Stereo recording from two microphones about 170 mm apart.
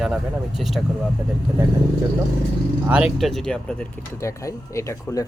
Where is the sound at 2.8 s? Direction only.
5° right (ahead or behind).